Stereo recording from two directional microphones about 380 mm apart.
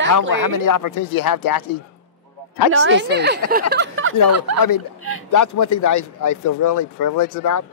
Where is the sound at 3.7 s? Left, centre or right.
Right.